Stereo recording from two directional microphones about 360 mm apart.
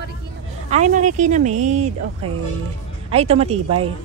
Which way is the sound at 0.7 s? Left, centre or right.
Centre.